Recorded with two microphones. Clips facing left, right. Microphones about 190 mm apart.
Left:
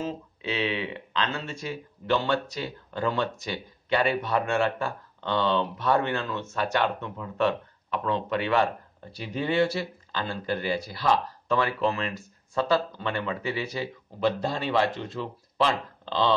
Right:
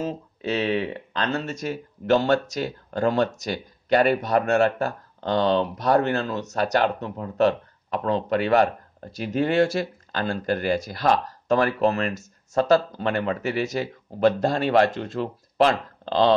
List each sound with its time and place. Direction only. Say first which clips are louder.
0.0 s speech: right 4 dB; 45° right (ahead or behind)